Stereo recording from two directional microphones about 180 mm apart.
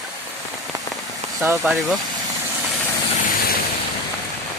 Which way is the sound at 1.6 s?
Centre (ahead or behind).